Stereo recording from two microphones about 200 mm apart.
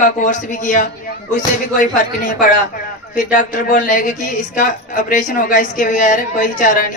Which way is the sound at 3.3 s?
40° left (ahead or behind).